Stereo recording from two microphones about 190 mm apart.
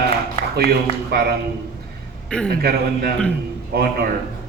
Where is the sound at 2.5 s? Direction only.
55° right (ahead or behind).